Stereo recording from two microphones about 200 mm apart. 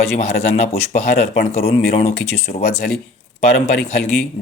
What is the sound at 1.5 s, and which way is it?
Speech, 35° left (ahead or behind).